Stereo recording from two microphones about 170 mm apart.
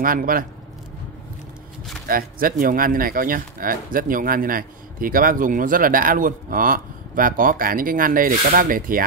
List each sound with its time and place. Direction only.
0.0 s speech: 55° right (ahead or behind)
2.0 s speech: 55° right (ahead or behind)